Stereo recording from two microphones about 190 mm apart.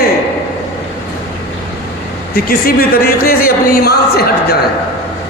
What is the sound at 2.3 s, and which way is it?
Speech, 50° left (ahead or behind).